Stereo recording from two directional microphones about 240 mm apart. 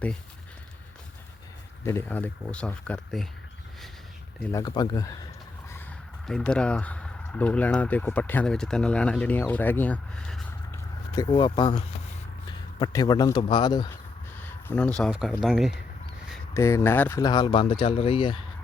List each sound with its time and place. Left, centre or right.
1.8 s speech: centre
4.4 s speech: centre
6.2 s speech: centre
11.1 s speech: centre
16.6 s speech: centre